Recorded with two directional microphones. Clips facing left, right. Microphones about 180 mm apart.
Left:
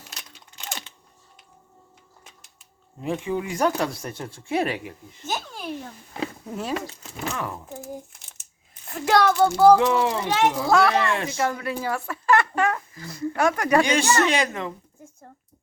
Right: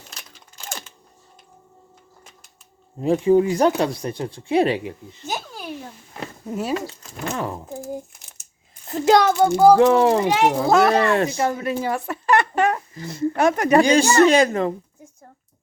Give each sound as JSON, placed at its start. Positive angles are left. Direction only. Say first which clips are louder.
{"t": 3.0, "sound": "speech", "louder": "right 11 dB", "side_deg": -35}
{"t": 3.8, "sound": "speech", "louder": "right 5 dB", "side_deg": -15}
{"t": 5.2, "sound": "speech", "louder": "even", "side_deg": -10}
{"t": 7.3, "sound": "speech", "louder": "right 4 dB", "side_deg": -30}
{"t": 8.9, "sound": "speech", "louder": "right 4 dB", "side_deg": -20}
{"t": 9.7, "sound": "speech", "louder": "right 6 dB", "side_deg": -45}
{"t": 10.7, "sound": "speech", "louder": "right 3 dB", "side_deg": -20}
{"t": 10.9, "sound": "speech", "louder": "right 5 dB", "side_deg": -40}
{"t": 13.8, "sound": "speech", "louder": "right 6 dB", "side_deg": -35}